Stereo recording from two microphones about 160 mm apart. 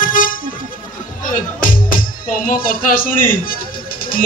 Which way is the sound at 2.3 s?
60° left (ahead or behind).